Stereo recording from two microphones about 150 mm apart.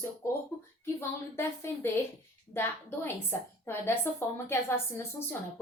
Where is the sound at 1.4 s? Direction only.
15° left (ahead or behind).